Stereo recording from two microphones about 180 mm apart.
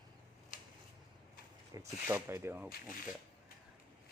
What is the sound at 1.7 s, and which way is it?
Speech, 15° right (ahead or behind).